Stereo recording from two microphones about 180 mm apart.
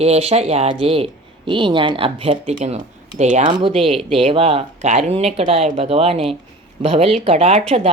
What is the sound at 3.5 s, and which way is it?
Speech, 30° right (ahead or behind).